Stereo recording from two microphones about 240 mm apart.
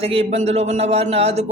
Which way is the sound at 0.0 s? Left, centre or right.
Right.